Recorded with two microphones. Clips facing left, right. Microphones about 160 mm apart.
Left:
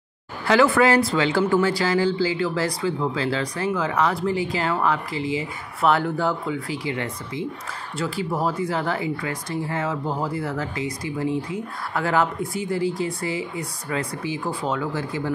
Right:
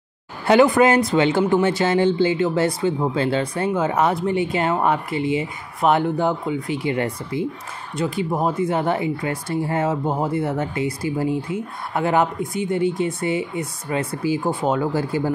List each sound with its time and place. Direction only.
0.5 s speech: 20° right (ahead or behind)
5.1 s speech: 30° left (ahead or behind)
5.9 s speech: 20° right (ahead or behind)
7.9 s speech: 20° right (ahead or behind)